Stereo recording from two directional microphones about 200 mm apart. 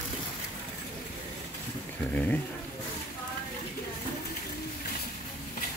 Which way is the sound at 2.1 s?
10° left (ahead or behind).